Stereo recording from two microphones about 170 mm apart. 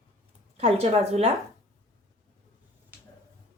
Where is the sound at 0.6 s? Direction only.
40° right (ahead or behind).